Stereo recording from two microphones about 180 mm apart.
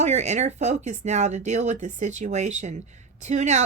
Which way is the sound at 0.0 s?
40° right (ahead or behind).